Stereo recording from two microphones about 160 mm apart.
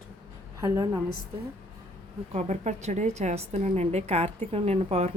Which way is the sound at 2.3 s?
45° right (ahead or behind).